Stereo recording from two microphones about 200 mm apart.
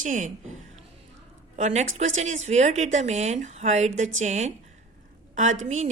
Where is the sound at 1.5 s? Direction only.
35° right (ahead or behind).